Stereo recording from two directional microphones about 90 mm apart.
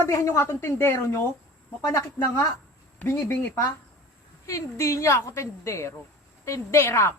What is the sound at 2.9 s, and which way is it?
A woman's voice, 20° left (ahead or behind).